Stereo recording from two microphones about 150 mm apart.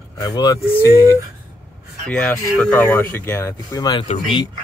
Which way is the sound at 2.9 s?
15° left (ahead or behind).